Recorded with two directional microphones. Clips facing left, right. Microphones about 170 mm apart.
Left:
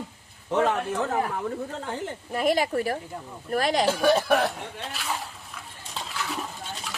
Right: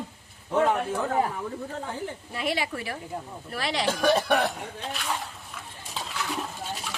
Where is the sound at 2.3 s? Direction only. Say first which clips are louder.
Left 7 dB; 45° left (ahead or behind).